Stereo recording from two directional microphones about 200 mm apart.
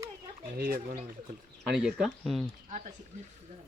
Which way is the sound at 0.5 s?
50° right (ahead or behind).